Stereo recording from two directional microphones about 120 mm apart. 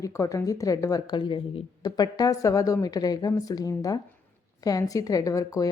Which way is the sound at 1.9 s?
30° left (ahead or behind).